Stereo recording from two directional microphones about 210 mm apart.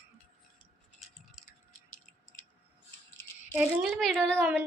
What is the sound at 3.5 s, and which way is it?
Speech, 5° right (ahead or behind).